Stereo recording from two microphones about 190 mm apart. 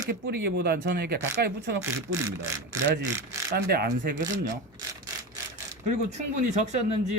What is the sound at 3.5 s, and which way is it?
Speech, 55° right (ahead or behind).